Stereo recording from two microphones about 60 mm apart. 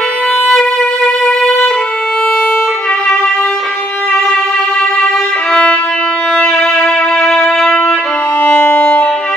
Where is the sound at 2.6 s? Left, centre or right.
Centre.